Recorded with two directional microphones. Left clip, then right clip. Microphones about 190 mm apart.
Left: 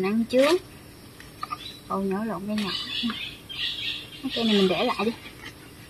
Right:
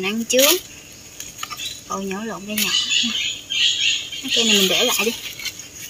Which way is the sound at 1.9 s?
5° right (ahead or behind).